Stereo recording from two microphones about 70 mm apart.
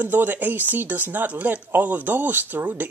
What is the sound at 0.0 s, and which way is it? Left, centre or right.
Speech, right.